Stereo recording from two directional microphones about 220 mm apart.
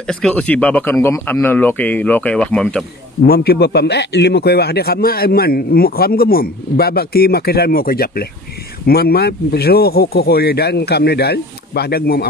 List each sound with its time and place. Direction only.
0.1 s speech: 5° left (ahead or behind)
3.3 s a man's voice: 45° left (ahead or behind)